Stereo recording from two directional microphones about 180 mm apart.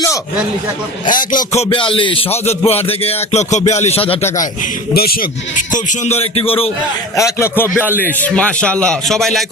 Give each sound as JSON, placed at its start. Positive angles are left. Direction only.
{"t": 1.1, "sound": "a sound", "side_deg": 50}
{"t": 1.7, "sound": "music", "side_deg": 30}
{"t": 4.6, "sound": "a man's voice", "side_deg": 55}
{"t": 5.7, "sound": "music", "side_deg": 45}
{"t": 7.2, "sound": "speech", "side_deg": 15}